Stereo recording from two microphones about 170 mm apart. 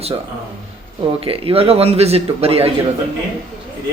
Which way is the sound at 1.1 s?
35° right (ahead or behind).